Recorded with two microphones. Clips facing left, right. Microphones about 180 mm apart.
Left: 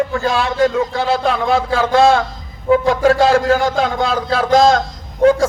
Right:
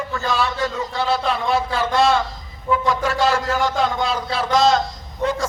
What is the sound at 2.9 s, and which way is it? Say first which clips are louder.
A man's voice: left 7 dB; 50° left (ahead or behind).